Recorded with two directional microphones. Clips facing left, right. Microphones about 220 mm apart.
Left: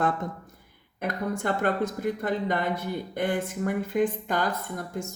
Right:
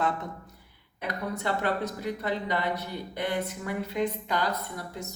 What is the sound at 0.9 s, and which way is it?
Speech, 50° left (ahead or behind).